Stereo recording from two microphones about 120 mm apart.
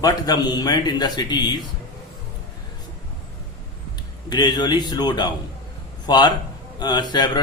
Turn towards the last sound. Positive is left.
turn(degrees=35)  # may be behind; listen again after turning